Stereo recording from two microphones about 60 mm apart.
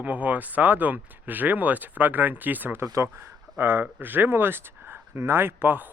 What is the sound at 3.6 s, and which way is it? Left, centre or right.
Speech, right.